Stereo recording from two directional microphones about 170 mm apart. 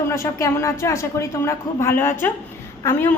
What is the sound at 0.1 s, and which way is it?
A woman's voice, 15° left (ahead or behind).